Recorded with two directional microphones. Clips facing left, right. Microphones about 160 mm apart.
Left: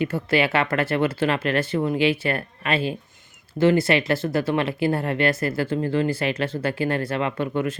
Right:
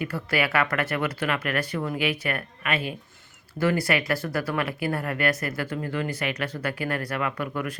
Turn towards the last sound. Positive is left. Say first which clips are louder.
# left 5 dB
turn(degrees=25)  # may be behind; listen again after turning